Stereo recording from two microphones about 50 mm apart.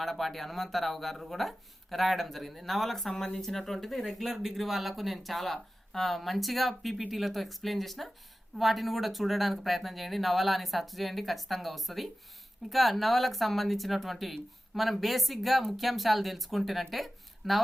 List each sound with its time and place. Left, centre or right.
0.0 s speech: centre